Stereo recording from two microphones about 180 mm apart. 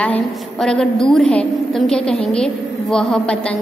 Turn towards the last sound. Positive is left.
turn(degrees=5)  # may be behind; listen again after turning